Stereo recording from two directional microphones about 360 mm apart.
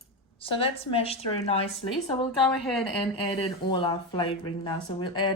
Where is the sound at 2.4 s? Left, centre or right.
Centre.